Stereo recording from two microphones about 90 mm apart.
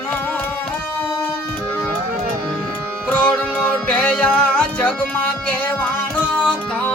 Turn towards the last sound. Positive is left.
turn(degrees=20)  # may be behind; listen again after turning